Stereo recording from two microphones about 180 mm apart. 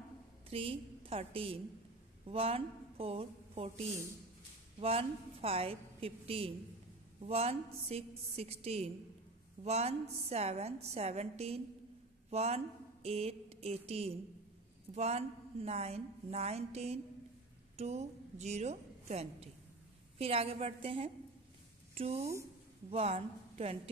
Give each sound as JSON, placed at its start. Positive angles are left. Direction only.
{"t": 0.5, "sound": "a woman's voice", "side_deg": -30}
{"t": 22.2, "sound": "a woman's voice", "side_deg": -15}
{"t": 22.8, "sound": "a woman's voice", "side_deg": -35}